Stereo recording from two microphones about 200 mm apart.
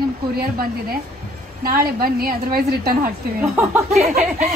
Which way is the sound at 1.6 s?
45° right (ahead or behind).